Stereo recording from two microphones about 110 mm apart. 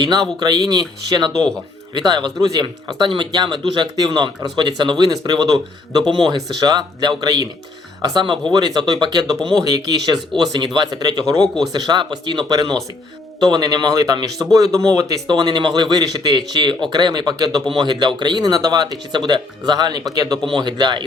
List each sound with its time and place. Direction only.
0.0 s speech: 35° right (ahead or behind)
11.3 s speech: 5° left (ahead or behind)
11.7 s speech: 40° right (ahead or behind)